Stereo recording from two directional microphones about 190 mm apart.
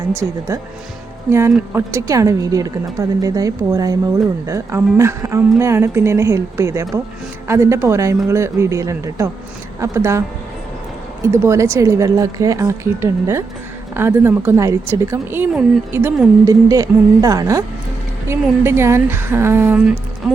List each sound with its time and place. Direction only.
0.1 s a woman's voice: 15° right (ahead or behind)
16.5 s a woman's voice: 15° right (ahead or behind)